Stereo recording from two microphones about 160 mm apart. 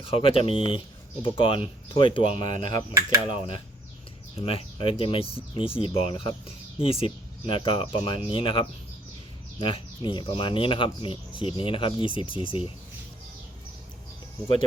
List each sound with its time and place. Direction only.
0.0 s speech: 35° left (ahead or behind)